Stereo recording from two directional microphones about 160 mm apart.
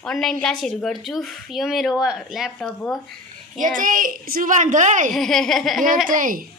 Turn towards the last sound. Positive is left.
turn(degrees=-55)  # may be behind; listen again after turning